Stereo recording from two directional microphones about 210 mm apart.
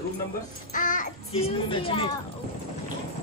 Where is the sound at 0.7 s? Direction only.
40° left (ahead or behind).